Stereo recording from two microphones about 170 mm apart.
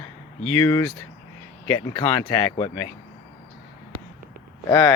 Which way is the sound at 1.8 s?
25° left (ahead or behind).